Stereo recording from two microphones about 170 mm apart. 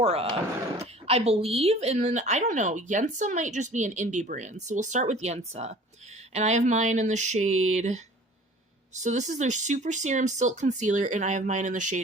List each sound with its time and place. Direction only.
0.0 s speech: 35° right (ahead or behind)
9.0 s speech: 45° right (ahead or behind)